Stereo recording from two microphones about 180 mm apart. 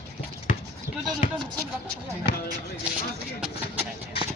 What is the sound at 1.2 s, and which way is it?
Basketball bounce, 40° left (ahead or behind).